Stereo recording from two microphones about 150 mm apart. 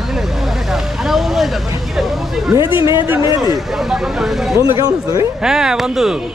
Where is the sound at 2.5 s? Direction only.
30° left (ahead or behind).